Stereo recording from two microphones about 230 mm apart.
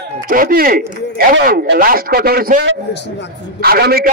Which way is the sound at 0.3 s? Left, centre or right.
Right.